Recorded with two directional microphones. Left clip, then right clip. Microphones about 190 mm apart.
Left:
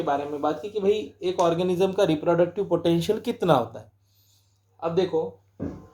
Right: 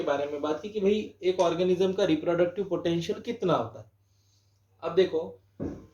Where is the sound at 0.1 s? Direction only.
50° left (ahead or behind).